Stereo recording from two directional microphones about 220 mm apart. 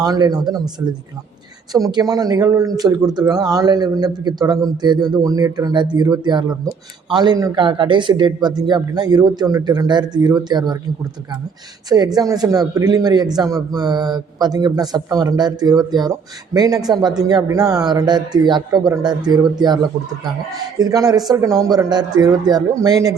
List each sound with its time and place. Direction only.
0.0 s a man's voice: 15° right (ahead or behind)
1.7 s a man's voice: 15° right (ahead or behind)
11.9 s a man's voice: 20° right (ahead or behind)